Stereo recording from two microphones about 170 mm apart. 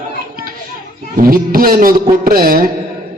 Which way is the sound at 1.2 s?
60° right (ahead or behind).